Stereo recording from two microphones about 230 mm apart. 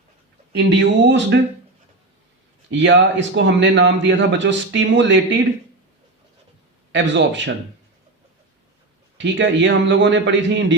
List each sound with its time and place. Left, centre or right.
0.5 s a man's voice: right
2.6 s a man's voice: right
6.9 s a man's voice: right
9.1 s a man's voice: right